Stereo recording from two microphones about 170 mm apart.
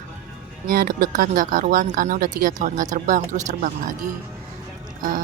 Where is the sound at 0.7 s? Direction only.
60° right (ahead or behind).